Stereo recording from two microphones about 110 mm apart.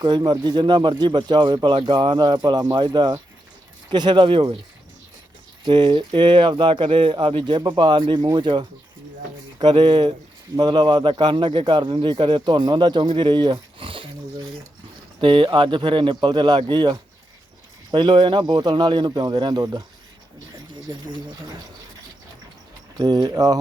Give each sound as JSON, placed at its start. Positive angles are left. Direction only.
{"t": 0.0, "sound": "a man's voice", "side_deg": -40}
{"t": 5.6, "sound": "a man's voice", "side_deg": -45}
{"t": 20.9, "sound": "a man's voice", "side_deg": -45}
{"t": 23.0, "sound": "speech", "side_deg": -40}